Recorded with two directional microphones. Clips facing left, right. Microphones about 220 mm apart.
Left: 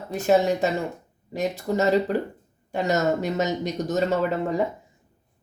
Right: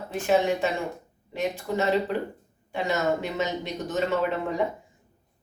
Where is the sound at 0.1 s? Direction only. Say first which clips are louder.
Left 3 dB; 40° left (ahead or behind).